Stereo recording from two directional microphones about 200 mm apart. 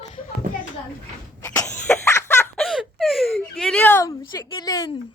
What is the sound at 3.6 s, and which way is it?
A woman's voice, 5° left (ahead or behind).